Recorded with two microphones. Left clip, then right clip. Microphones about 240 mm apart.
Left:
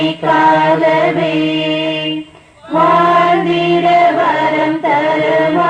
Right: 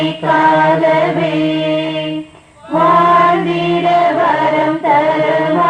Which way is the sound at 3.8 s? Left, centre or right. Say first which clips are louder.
Left 1 dB; left.